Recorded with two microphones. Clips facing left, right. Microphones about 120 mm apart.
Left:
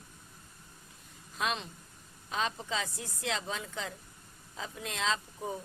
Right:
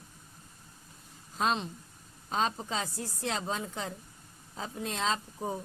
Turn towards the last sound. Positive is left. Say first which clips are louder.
# right 2 dB
turn(degrees=-35)  # may be behind; listen again after turning